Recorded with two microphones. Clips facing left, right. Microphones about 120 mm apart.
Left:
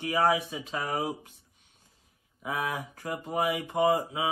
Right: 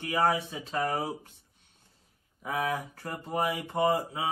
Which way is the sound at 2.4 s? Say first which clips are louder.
Right 1 dB; 15° left (ahead or behind).